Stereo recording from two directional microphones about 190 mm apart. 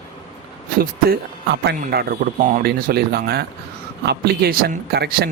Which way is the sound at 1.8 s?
55° right (ahead or behind).